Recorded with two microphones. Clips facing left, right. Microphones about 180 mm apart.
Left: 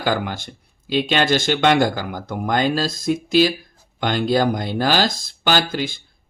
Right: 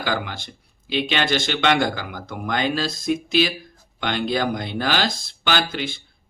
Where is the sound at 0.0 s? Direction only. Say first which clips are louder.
Left 4 dB; 45° left (ahead or behind).